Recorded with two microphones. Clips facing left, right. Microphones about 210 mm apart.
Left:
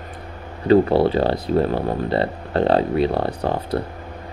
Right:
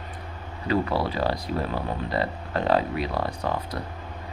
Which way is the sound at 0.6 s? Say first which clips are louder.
Left 10 dB; 30° left (ahead or behind).